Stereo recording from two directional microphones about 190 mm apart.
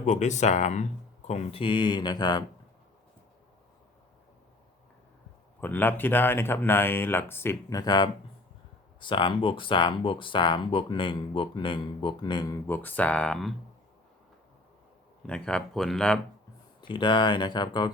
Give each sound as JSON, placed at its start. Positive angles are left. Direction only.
{"t": 0.0, "sound": "speech", "side_deg": 40}
{"t": 5.5, "sound": "speech", "side_deg": 10}
{"t": 12.6, "sound": "speech", "side_deg": 10}
{"t": 15.3, "sound": "speech", "side_deg": 5}
{"t": 16.8, "sound": "speech", "side_deg": 25}